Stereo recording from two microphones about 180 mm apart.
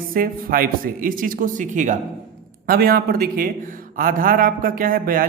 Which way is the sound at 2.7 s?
55° right (ahead or behind).